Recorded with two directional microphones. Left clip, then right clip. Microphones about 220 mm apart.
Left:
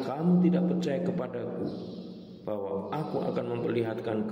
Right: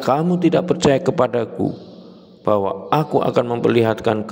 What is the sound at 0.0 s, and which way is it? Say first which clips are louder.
A man's voice: right 12 dB; 45° right (ahead or behind).